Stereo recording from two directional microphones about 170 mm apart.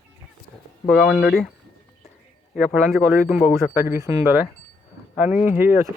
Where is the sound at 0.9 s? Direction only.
Centre (ahead or behind).